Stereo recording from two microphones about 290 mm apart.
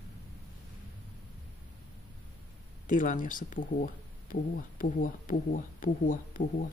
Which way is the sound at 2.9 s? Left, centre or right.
Left.